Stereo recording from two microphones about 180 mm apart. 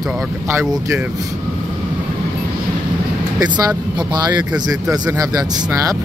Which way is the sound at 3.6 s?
20° right (ahead or behind).